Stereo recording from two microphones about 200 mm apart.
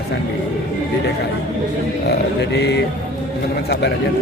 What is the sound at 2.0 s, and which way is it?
Mantra, 55° left (ahead or behind).